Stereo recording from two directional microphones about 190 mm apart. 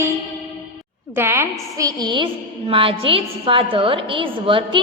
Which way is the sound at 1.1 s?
10° right (ahead or behind).